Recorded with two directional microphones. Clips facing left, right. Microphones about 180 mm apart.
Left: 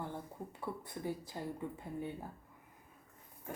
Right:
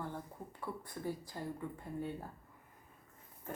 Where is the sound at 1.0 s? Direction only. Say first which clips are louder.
Left 1 dB; 25° left (ahead or behind).